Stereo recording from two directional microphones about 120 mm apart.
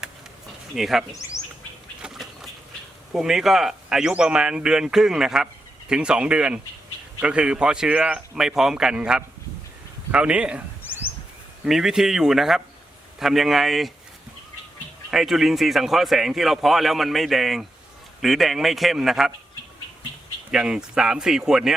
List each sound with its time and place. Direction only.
0.8 s a man's voice: centre (ahead or behind)
1.4 s bird: centre (ahead or behind)
2.0 s a sound: 5° right (ahead or behind)
3.1 s a man's voice: 5° right (ahead or behind)
11.6 s a man's voice: 5° right (ahead or behind)
15.1 s a man's voice: 5° right (ahead or behind)
20.5 s a man's voice: 5° right (ahead or behind)